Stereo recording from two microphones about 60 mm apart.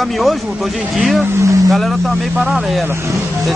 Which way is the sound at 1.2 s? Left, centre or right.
Right.